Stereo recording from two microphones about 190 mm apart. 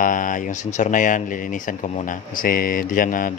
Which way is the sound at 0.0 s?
45° left (ahead or behind).